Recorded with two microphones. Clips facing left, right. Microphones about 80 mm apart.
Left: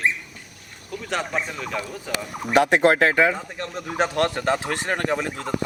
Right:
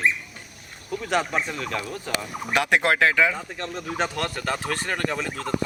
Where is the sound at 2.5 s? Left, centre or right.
Left.